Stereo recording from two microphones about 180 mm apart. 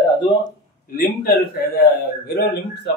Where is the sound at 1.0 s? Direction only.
55° left (ahead or behind).